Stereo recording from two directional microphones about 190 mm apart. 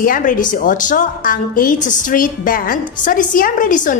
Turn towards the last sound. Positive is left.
turn(degrees=45)  # may be behind; listen again after turning